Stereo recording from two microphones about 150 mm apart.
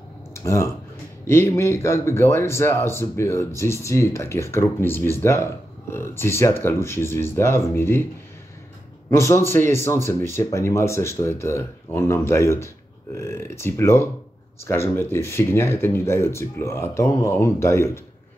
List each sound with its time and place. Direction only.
0.3 s a sound: 20° left (ahead or behind)
1.2 s a man's voice: 20° left (ahead or behind)
9.1 s a man's voice: 20° left (ahead or behind)